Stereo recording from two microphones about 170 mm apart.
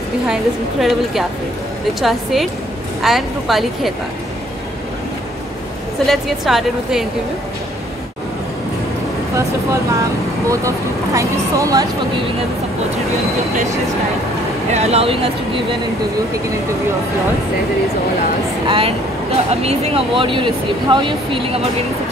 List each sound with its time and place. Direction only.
0.3 s a woman's voice: centre (ahead or behind)
6.0 s a woman's voice: centre (ahead or behind)
11.1 s speech: 20° right (ahead or behind)
14.7 s speech: 40° right (ahead or behind)
18.7 s speech: 35° right (ahead or behind)